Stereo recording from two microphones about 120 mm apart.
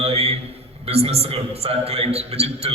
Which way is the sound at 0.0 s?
60° right (ahead or behind).